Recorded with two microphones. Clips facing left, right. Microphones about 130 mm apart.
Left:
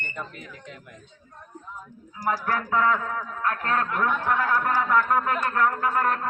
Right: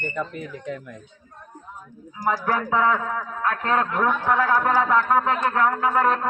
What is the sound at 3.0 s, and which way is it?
A man's voice, 30° right (ahead or behind).